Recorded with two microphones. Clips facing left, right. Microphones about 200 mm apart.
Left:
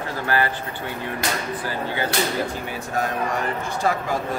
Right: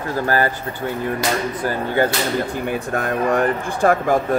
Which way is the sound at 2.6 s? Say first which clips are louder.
Right 4 dB; 55° right (ahead or behind).